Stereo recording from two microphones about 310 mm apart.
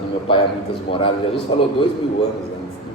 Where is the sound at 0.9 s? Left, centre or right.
Centre.